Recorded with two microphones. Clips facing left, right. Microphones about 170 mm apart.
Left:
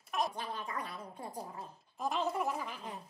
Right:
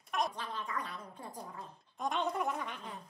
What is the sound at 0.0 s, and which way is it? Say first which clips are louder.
Speech: even; centre (ahead or behind).